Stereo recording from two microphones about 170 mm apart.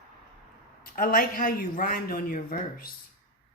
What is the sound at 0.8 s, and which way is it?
A man's voice, 55° left (ahead or behind).